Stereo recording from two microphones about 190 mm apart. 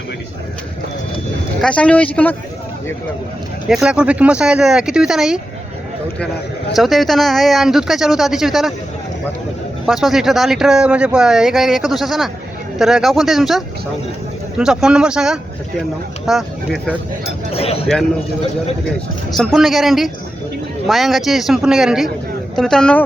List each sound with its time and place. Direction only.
1.6 s speech: 5° left (ahead or behind)
3.7 s speech: 5° right (ahead or behind)
6.7 s speech: centre (ahead or behind)
9.8 s speech: centre (ahead or behind)
17.5 s speech: 30° left (ahead or behind)
19.4 s speech: centre (ahead or behind)